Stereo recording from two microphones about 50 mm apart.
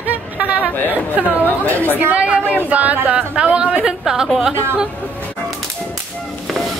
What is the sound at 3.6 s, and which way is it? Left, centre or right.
A woman's voice, centre.